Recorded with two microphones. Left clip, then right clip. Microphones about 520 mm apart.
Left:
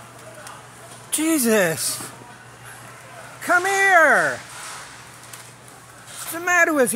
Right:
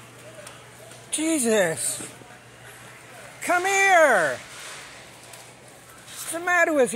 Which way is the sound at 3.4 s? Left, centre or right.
Right.